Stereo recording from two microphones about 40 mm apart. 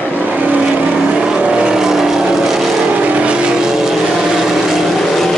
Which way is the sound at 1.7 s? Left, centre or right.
Centre.